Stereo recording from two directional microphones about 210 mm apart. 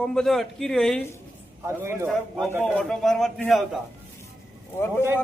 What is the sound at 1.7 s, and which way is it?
Speech, 15° right (ahead or behind).